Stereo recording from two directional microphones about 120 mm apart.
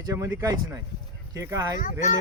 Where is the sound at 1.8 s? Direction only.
90° left.